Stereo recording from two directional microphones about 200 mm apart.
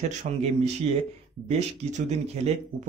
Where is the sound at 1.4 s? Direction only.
35° right (ahead or behind).